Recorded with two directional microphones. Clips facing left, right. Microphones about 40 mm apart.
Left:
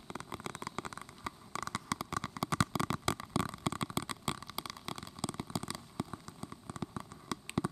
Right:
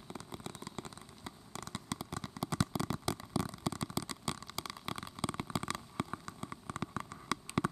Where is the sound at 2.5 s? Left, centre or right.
Left.